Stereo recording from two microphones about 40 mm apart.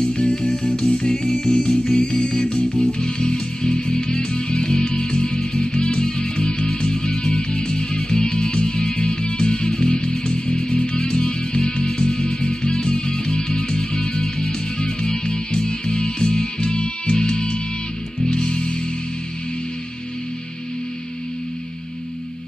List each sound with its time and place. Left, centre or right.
0.0 s music: left